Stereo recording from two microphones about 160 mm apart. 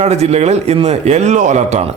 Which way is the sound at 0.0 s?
45° right (ahead or behind).